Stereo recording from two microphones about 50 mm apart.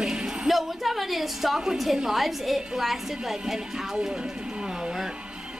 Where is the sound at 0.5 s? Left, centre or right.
Centre.